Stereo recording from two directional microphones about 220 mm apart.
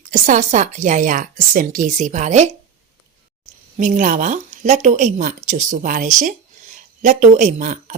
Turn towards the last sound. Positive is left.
turn(degrees=-35)  # may be behind; listen again after turning